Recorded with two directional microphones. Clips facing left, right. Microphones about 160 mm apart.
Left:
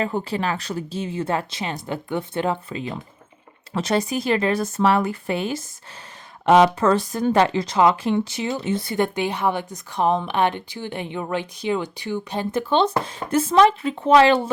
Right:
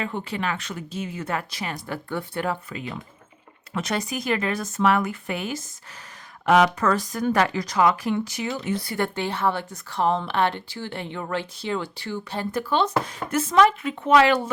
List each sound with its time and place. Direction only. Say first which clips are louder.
0.0 s speech: left 4 dB; 35° left (ahead or behind)